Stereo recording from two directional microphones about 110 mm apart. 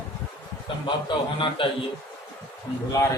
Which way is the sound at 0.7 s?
50° left (ahead or behind).